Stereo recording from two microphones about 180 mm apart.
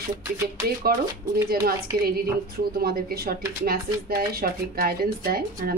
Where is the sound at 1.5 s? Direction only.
55° right (ahead or behind).